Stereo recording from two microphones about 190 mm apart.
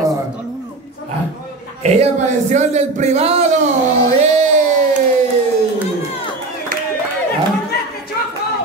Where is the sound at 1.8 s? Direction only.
35° right (ahead or behind).